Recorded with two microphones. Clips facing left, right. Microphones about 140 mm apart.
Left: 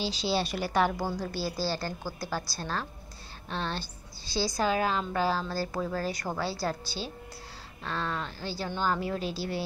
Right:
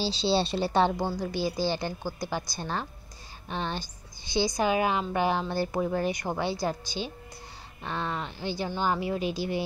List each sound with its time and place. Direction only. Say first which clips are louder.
0.0 s a woman's voice: right 3 dB; 30° right (ahead or behind)